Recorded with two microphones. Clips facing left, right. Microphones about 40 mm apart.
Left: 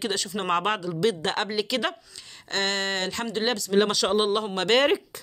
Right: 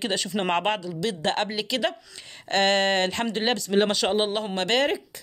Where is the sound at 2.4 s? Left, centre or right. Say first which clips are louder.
Right 6 dB; right.